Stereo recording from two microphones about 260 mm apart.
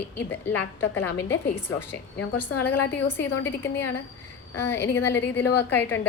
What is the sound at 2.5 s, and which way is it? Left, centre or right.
Speech, left.